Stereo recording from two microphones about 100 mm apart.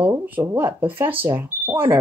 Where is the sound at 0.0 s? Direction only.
20° right (ahead or behind).